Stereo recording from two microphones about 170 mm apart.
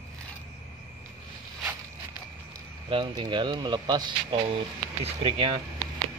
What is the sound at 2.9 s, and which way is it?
Speech, 30° right (ahead or behind).